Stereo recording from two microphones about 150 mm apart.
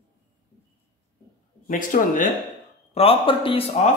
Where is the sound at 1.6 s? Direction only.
60° left (ahead or behind).